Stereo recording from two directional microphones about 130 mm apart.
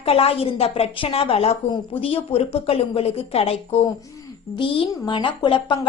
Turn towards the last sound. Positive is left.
turn(degrees=40)  # may be behind; listen again after turning